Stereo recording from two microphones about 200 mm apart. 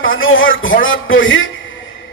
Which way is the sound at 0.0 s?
80° left.